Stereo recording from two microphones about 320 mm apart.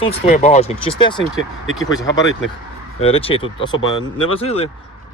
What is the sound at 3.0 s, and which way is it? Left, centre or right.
Speech, centre.